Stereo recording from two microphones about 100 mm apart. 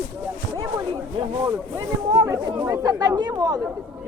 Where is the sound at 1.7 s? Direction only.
30° right (ahead or behind).